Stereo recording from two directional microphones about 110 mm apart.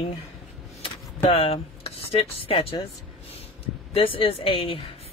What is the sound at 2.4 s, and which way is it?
Speech, 55° left (ahead or behind).